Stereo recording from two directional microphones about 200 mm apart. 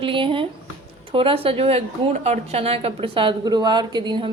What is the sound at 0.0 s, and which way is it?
A woman's voice, 25° right (ahead or behind).